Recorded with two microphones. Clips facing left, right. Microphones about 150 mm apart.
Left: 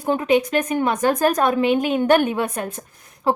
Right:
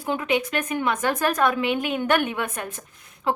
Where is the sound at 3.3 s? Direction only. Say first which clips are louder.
Left 4 dB; 40° left (ahead or behind).